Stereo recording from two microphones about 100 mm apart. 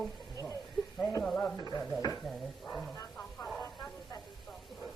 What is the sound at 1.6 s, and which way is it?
Stir, 35° left (ahead or behind).